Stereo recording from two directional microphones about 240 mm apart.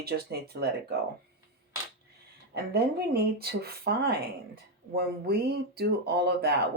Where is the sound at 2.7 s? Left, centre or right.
Right.